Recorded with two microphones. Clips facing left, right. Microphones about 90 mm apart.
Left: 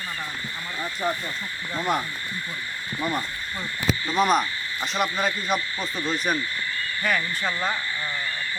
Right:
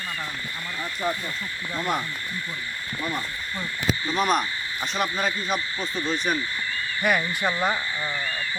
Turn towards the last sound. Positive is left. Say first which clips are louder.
# right 2 dB
turn(degrees=-15)  # may be behind; listen again after turning